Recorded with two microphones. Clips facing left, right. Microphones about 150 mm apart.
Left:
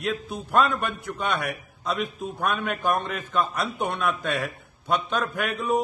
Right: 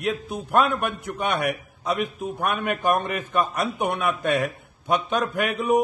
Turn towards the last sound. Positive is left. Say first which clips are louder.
# right 3 dB
turn(degrees=-15)  # may be behind; listen again after turning